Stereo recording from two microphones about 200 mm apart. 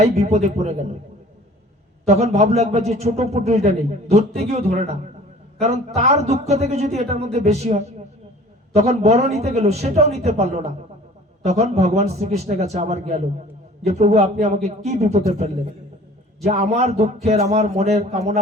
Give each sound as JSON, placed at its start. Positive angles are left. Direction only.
{"t": 0.0, "sound": "speech", "side_deg": -35}
{"t": 2.0, "sound": "speech", "side_deg": -35}